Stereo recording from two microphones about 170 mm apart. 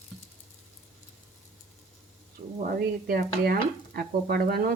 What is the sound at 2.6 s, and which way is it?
Stir, 60° right (ahead or behind).